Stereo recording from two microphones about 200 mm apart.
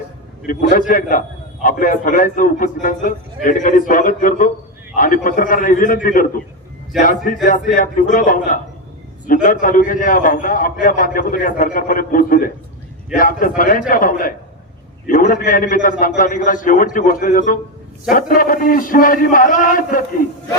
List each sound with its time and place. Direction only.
0.4 s a man's voice: 45° left (ahead or behind)